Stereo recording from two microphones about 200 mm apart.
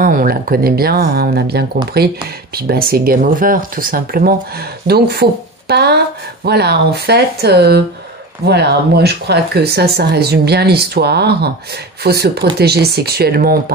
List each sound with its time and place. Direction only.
0.0 s speech: 45° right (ahead or behind)